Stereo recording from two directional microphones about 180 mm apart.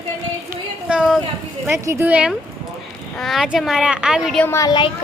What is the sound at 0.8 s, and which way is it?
A woman's voice, 5° right (ahead or behind).